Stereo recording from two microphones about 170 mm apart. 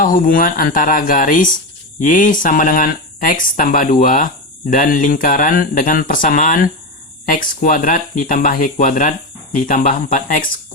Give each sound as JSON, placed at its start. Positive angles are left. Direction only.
{"t": 0.0, "sound": "speech", "side_deg": 55}